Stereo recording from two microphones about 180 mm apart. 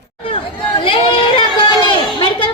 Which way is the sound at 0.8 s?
30° left (ahead or behind).